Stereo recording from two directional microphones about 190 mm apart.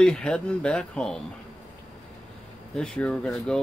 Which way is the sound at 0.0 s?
5° left (ahead or behind).